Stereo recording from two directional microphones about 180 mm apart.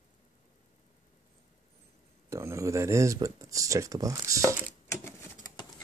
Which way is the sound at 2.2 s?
15° right (ahead or behind).